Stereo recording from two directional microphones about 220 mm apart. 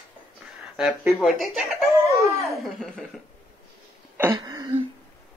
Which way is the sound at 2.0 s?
15° right (ahead or behind).